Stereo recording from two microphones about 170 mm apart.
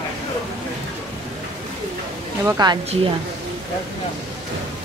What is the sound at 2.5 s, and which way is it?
Speech, 25° right (ahead or behind).